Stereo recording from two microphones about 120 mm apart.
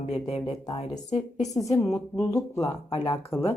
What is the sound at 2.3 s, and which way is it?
Speech, 25° left (ahead or behind).